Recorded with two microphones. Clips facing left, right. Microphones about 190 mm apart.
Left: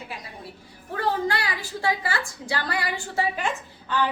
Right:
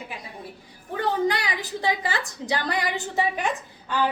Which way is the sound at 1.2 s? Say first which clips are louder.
Right 2 dB; 20° right (ahead or behind).